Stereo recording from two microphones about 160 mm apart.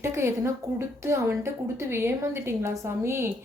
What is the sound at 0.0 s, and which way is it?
Speech, 15° right (ahead or behind).